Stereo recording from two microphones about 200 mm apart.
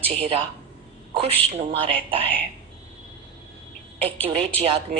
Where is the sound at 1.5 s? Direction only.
30° right (ahead or behind).